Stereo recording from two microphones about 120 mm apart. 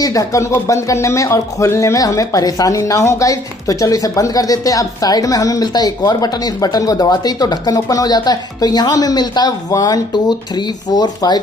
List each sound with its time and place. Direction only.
0.0 s speech: 30° left (ahead or behind)